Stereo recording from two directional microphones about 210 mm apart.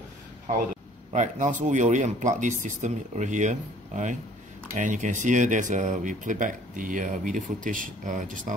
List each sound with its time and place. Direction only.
1.1 s speech: 35° right (ahead or behind)